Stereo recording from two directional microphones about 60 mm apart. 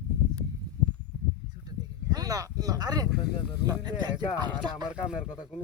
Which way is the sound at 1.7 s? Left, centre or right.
Right.